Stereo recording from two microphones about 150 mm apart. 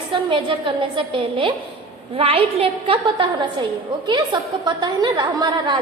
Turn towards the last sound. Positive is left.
turn(degrees=-30)  # may be behind; listen again after turning